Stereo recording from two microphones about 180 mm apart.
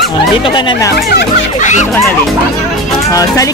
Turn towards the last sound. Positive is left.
turn(degrees=20)  # may be behind; listen again after turning